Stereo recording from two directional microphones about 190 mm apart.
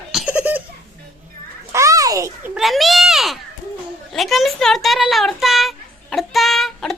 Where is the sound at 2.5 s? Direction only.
Centre (ahead or behind).